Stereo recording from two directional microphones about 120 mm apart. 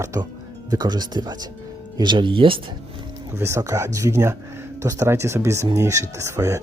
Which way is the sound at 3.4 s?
25° right (ahead or behind).